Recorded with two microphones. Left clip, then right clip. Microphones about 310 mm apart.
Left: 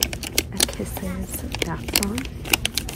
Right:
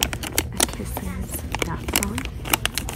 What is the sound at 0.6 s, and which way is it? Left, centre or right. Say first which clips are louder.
Speech: left 1 dB; centre.